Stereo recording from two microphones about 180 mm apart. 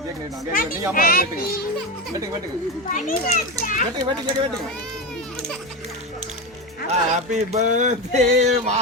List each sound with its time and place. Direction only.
0.9 s a child's voice: 55° left (ahead or behind)
2.9 s a child's voice: 45° left (ahead or behind)
3.9 s speech: 25° right (ahead or behind)
6.8 s speech: 40° right (ahead or behind)